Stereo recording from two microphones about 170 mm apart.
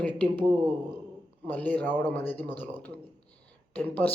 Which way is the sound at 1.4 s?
10° left (ahead or behind).